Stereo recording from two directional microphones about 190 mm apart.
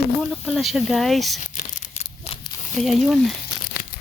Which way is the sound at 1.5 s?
35° left (ahead or behind).